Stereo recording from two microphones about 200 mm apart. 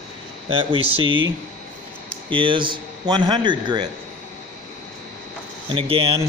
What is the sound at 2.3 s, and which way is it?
Speech, 25° right (ahead or behind).